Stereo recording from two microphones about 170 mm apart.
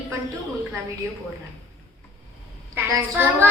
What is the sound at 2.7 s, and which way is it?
Speech, 10° right (ahead or behind).